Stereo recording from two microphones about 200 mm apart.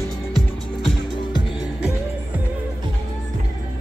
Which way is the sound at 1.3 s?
20° left (ahead or behind).